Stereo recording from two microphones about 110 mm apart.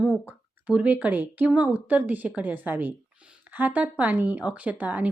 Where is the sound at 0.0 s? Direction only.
15° right (ahead or behind).